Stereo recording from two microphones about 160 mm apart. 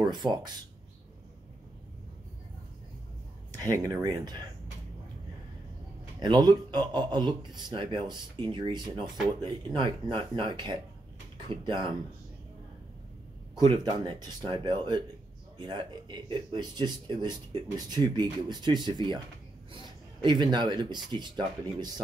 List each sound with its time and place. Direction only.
0.0 s speech: 25° right (ahead or behind)
3.8 s speech: 25° right (ahead or behind)
6.1 s speech: 30° right (ahead or behind)
13.6 s speech: 25° right (ahead or behind)